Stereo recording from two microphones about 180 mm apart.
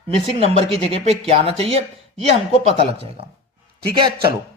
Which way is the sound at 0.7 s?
35° right (ahead or behind).